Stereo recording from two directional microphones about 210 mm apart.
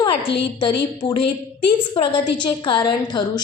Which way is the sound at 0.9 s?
20° left (ahead or behind).